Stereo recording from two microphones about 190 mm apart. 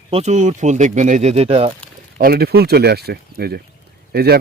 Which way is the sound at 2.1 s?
55° right (ahead or behind).